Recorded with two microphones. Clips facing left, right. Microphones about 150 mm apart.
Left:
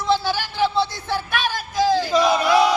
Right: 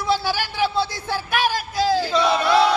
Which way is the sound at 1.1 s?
10° right (ahead or behind).